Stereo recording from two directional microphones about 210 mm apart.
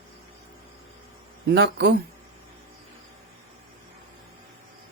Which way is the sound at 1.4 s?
55° right (ahead or behind).